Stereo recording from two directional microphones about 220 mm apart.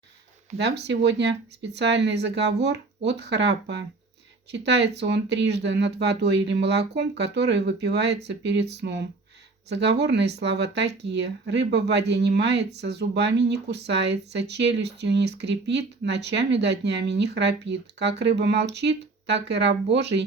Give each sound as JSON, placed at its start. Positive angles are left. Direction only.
{"t": 0.5, "sound": "speech", "side_deg": -50}